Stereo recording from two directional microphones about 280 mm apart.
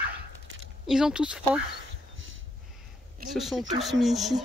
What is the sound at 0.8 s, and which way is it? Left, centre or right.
Speech, centre.